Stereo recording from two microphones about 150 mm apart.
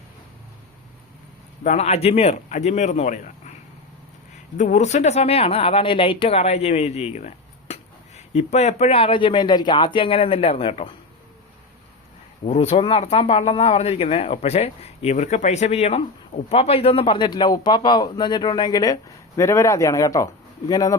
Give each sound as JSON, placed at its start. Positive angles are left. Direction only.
{"t": 1.6, "sound": "speech", "side_deg": 45}
{"t": 4.5, "sound": "speech", "side_deg": 55}
{"t": 12.5, "sound": "a man's voice", "side_deg": 40}